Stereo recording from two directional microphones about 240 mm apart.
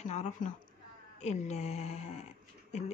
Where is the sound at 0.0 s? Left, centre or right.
Left.